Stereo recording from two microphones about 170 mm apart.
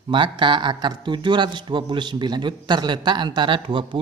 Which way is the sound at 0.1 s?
30° right (ahead or behind).